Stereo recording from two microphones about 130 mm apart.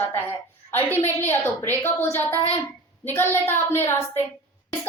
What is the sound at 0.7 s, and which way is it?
A woman's voice, 15° left (ahead or behind).